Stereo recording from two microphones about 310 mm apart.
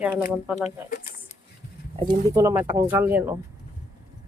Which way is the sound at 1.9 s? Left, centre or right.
Centre.